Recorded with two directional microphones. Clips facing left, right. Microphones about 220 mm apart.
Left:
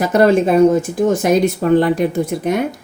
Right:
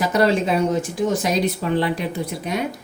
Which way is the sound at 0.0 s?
50° left (ahead or behind).